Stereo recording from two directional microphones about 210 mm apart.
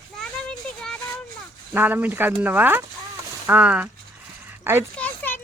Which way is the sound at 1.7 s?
10° right (ahead or behind).